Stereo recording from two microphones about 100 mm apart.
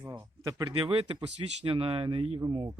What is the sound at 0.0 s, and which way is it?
Speech, 25° right (ahead or behind).